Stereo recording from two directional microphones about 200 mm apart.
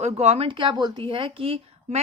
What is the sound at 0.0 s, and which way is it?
A woman's voice, 35° right (ahead or behind).